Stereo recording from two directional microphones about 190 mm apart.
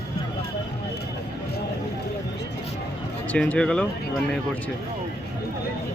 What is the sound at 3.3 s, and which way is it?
Speech, 5° left (ahead or behind).